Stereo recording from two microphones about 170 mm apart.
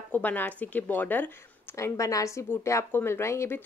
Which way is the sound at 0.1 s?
10° left (ahead or behind).